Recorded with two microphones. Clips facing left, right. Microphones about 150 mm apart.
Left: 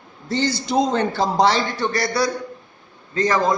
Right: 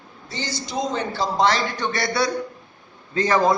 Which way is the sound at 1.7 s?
Centre (ahead or behind).